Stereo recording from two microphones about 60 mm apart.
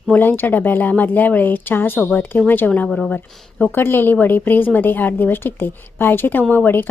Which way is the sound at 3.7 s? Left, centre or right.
Left.